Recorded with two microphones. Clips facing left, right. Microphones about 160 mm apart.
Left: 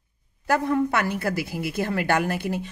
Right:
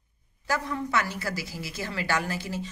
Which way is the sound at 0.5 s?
55° left (ahead or behind).